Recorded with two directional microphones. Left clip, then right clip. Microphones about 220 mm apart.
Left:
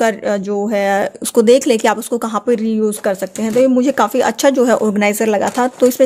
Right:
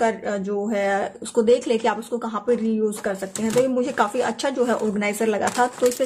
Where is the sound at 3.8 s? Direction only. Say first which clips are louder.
Left 8 dB; 40° left (ahead or behind).